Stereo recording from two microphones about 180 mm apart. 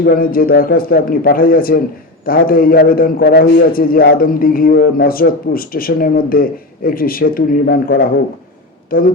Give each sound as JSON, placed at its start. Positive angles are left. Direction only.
{"t": 0.0, "sound": "a man's voice", "side_deg": 55}